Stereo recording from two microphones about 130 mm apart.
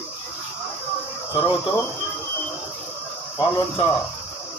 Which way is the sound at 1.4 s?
40° left (ahead or behind).